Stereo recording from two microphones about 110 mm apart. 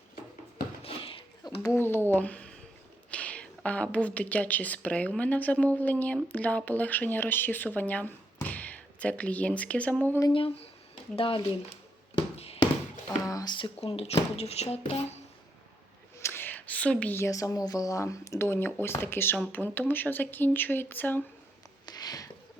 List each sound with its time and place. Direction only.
0.8 s a sound: 60° left (ahead or behind)
1.7 s a woman's voice: 20° left (ahead or behind)
10.3 s speech: 55° left (ahead or behind)
12.1 s tap: 65° left (ahead or behind)
13.2 s speech: 35° left (ahead or behind)
13.8 s speech: 65° left (ahead or behind)
16.2 s a woman's voice: 20° left (ahead or behind)
21.8 s a sound: 35° left (ahead or behind)